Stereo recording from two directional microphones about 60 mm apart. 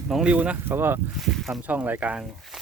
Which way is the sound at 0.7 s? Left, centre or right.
Right.